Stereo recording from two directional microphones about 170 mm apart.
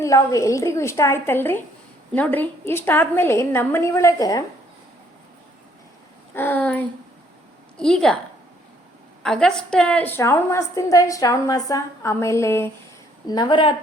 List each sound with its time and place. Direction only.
0.0 s a woman's voice: 20° left (ahead or behind)
6.3 s a sound: 10° left (ahead or behind)
7.8 s a woman's voice: 5° left (ahead or behind)
9.2 s a woman's voice: 5° left (ahead or behind)
13.2 s a woman's voice: 25° left (ahead or behind)